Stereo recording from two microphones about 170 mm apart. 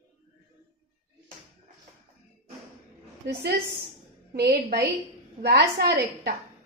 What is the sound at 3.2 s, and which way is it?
A woman's voice, 75° right (ahead or behind).